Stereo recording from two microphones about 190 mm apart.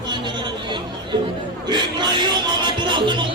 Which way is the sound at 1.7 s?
25° right (ahead or behind).